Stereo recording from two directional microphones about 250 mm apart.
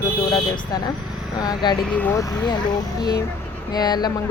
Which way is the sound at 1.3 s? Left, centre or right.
Centre.